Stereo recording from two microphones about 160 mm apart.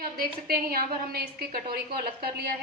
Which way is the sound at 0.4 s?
70° right (ahead or behind).